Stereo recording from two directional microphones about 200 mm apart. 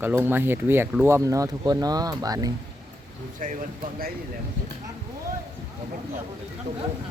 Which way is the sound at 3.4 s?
40° right (ahead or behind).